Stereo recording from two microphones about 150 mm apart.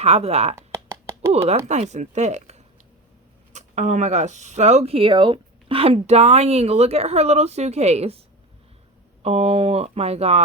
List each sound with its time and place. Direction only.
0.0 s speech: 45° right (ahead or behind)
0.5 s a sound: 20° right (ahead or behind)
1.5 s speech: 50° right (ahead or behind)
9.2 s speech: 45° right (ahead or behind)